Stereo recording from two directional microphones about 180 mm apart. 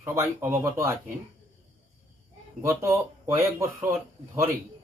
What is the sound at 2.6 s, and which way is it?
Speech, 15° right (ahead or behind).